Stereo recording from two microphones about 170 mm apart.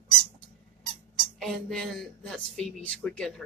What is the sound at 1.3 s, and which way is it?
A woman's voice, centre (ahead or behind).